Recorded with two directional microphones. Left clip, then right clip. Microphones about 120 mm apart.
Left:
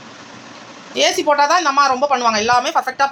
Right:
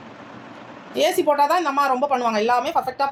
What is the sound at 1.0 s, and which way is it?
A woman's voice, 10° left (ahead or behind).